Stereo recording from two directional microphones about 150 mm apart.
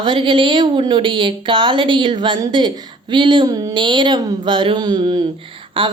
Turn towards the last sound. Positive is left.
turn(degrees=-35)  # may be behind; listen again after turning